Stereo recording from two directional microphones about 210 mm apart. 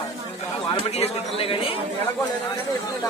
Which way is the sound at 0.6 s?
30° left (ahead or behind).